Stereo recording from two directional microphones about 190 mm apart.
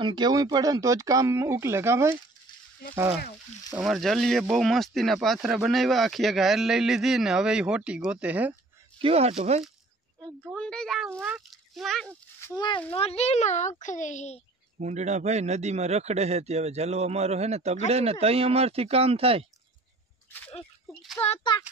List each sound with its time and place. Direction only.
0.0 s speech: 25° right (ahead or behind)
3.7 s speech: centre (ahead or behind)
9.0 s speech: 30° right (ahead or behind)
10.5 s speech: 5° left (ahead or behind)
12.4 s a sound: 15° left (ahead or behind)
12.9 s a child's voice: 35° left (ahead or behind)
14.8 s speech: 40° right (ahead or behind)
20.9 s a child's voice: 5° left (ahead or behind)